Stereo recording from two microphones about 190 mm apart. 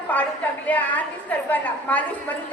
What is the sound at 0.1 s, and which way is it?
A woman's voice, 10° left (ahead or behind).